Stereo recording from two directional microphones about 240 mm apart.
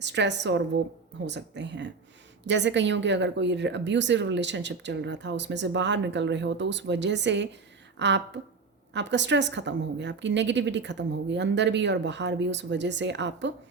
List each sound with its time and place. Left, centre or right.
0.0 s a woman's voice: right